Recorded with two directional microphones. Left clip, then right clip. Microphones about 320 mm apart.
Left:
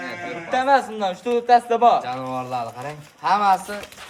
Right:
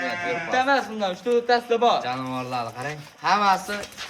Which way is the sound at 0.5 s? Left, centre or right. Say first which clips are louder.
Left 4 dB; left.